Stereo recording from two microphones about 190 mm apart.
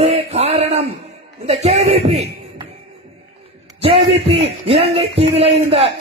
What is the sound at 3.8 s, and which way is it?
A man's voice, 30° right (ahead or behind).